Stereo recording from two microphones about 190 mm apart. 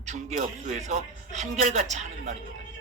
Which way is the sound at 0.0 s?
40° right (ahead or behind).